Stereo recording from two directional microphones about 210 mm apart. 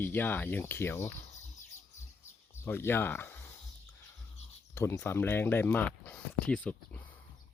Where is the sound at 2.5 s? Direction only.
10° left (ahead or behind).